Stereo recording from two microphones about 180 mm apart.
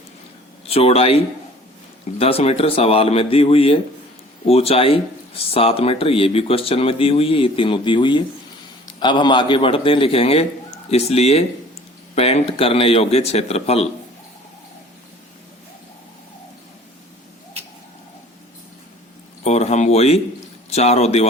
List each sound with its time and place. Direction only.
0.7 s a man's voice: 35° left (ahead or behind)
19.5 s a sound: 40° left (ahead or behind)
20.7 s a man's voice: 35° left (ahead or behind)